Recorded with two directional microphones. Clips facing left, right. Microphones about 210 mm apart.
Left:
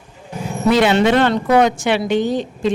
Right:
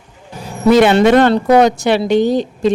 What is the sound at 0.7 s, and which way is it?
Speech, 50° right (ahead or behind).